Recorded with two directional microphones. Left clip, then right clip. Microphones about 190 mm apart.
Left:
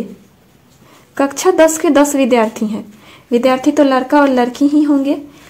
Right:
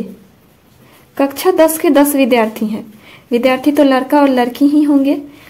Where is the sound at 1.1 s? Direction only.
Centre (ahead or behind).